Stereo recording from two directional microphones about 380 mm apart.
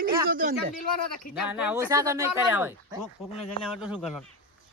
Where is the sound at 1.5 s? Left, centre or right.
Centre.